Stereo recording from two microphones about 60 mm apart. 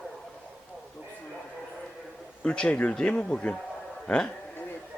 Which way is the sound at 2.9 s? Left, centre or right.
Centre.